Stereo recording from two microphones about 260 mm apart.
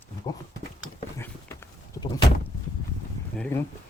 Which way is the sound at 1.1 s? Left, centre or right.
Centre.